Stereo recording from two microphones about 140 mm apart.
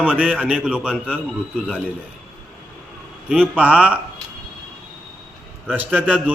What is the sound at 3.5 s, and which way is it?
Speech, 10° right (ahead or behind).